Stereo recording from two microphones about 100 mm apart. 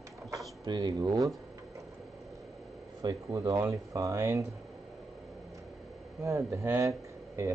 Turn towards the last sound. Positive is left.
turn(degrees=-30)  # may be behind; listen again after turning